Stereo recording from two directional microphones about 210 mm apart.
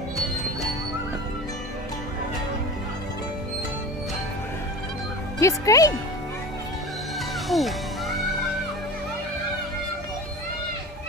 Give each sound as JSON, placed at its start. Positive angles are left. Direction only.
{"t": 5.4, "sound": "speech", "side_deg": 15}
{"t": 7.4, "sound": "speech", "side_deg": 0}